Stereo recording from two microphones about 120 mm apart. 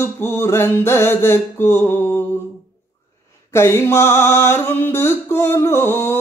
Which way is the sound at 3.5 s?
20° left (ahead or behind).